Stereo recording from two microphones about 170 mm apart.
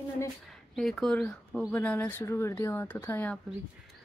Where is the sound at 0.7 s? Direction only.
5° left (ahead or behind).